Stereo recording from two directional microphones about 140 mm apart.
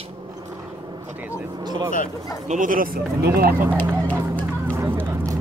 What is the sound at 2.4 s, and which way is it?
Speech, 65° right (ahead or behind).